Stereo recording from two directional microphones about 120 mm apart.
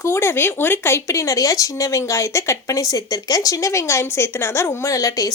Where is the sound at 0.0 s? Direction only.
20° left (ahead or behind).